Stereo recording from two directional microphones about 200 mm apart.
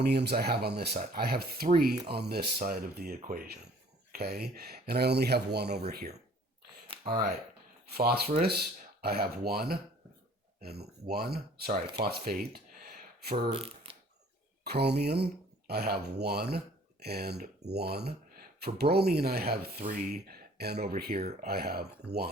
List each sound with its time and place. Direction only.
0.0 s speech: 55° right (ahead or behind)
6.8 s a sound: 25° right (ahead or behind)
7.9 s speech: 50° right (ahead or behind)
13.5 s speech: 25° right (ahead or behind)
14.6 s speech: 55° right (ahead or behind)